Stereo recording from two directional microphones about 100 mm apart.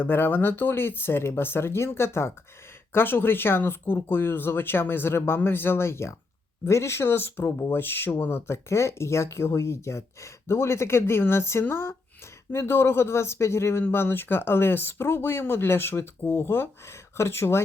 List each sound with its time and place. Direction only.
0.0 s speech: 20° left (ahead or behind)